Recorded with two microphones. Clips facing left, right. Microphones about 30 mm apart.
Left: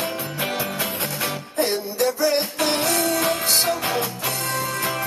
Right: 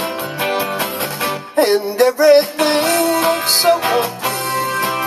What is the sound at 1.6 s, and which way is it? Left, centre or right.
Music, right.